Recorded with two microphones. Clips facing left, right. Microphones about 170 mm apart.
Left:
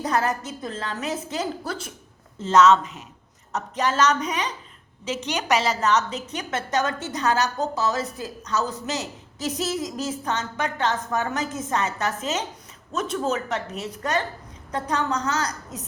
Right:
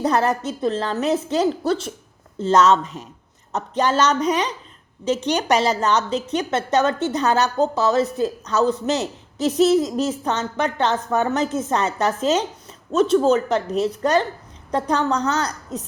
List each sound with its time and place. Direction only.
0.0 s a woman's voice: 35° right (ahead or behind)